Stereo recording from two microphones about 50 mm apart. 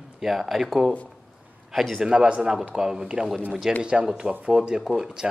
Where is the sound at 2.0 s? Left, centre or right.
Centre.